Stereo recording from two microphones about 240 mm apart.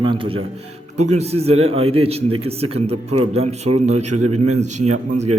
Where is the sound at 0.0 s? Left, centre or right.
Right.